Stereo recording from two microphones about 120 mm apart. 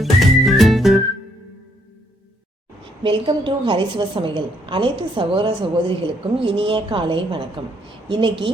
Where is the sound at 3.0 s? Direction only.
45° right (ahead or behind).